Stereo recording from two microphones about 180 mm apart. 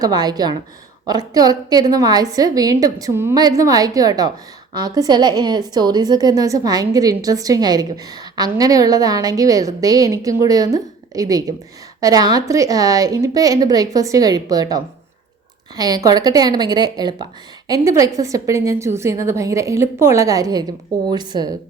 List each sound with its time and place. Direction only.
0.0 s a woman's voice: 20° right (ahead or behind)